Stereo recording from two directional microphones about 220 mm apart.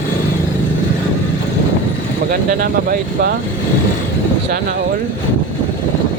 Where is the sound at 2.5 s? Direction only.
40° right (ahead or behind).